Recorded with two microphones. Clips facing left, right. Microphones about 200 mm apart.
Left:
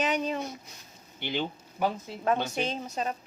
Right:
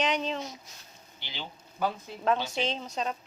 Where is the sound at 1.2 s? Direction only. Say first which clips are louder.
Left 11 dB; 55° left (ahead or behind).